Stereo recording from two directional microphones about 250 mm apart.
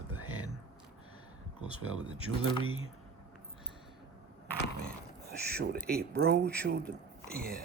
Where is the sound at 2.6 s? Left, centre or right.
Right.